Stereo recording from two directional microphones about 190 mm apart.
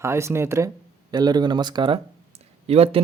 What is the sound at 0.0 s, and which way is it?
Speech, 15° right (ahead or behind).